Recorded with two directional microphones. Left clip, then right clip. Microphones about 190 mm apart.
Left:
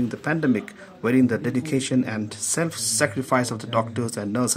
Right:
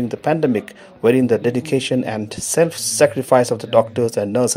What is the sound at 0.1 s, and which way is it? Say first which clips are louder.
Speech: right 10 dB; 25° right (ahead or behind).